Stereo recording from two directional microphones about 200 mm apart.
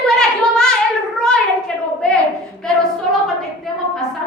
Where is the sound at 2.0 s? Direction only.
5° left (ahead or behind).